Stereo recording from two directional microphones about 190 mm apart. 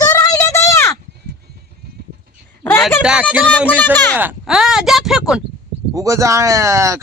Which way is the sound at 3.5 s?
10° left (ahead or behind).